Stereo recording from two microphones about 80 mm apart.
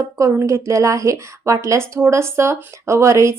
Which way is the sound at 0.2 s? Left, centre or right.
Right.